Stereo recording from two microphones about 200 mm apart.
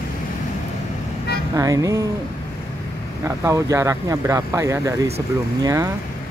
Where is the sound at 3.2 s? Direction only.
15° right (ahead or behind).